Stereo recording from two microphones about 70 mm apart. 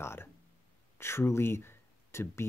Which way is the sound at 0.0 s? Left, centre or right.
Left.